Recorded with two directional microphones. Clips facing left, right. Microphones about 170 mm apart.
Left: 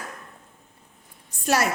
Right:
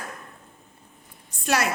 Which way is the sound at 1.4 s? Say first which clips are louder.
Left 1 dB; 45° left (ahead or behind).